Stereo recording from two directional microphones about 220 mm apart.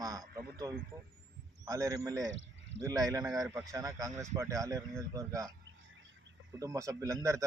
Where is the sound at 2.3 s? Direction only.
55° right (ahead or behind).